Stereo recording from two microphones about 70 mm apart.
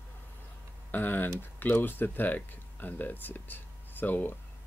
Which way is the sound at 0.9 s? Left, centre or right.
Left.